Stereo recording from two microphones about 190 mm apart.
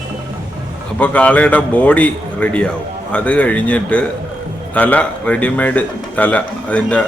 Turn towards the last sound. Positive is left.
turn(degrees=5)  # may be behind; listen again after turning